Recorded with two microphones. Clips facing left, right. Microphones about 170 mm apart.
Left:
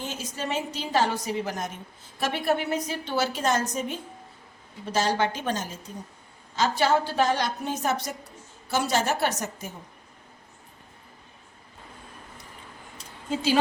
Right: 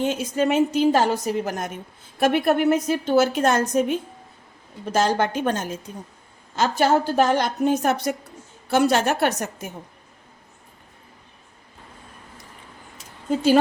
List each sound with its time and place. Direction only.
0.0 s a woman's voice: 60° right (ahead or behind)
4.9 s a woman's voice: 50° right (ahead or behind)